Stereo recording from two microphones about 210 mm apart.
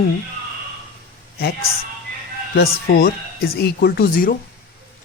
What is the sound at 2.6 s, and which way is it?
Speech, 45° left (ahead or behind).